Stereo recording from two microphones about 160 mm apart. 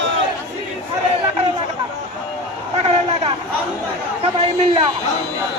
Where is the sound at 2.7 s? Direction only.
40° right (ahead or behind).